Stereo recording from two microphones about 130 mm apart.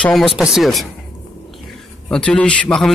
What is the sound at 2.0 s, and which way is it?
Speech, 5° left (ahead or behind).